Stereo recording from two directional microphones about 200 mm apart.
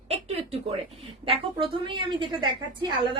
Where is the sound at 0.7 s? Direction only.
30° right (ahead or behind).